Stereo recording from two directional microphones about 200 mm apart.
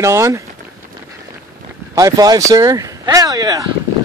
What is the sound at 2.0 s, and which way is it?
Speech, 20° right (ahead or behind).